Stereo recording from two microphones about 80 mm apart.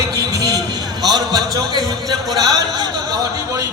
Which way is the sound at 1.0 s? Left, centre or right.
Right.